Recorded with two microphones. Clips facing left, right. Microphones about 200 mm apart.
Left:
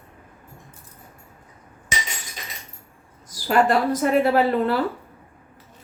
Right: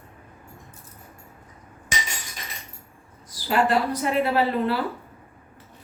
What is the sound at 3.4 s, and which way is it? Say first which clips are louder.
A woman's voice: left 3 dB; 45° left (ahead or behind).